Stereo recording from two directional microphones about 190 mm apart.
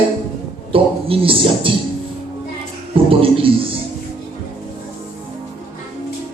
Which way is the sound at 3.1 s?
30° right (ahead or behind).